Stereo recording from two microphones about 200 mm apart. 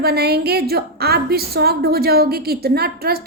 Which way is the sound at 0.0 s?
50° right (ahead or behind).